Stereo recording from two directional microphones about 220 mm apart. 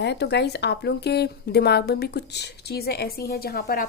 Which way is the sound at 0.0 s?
50° left (ahead or behind).